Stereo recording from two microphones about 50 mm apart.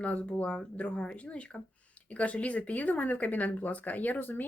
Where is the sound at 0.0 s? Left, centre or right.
Left.